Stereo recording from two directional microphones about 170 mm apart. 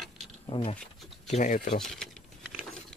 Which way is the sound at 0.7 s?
Centre (ahead or behind).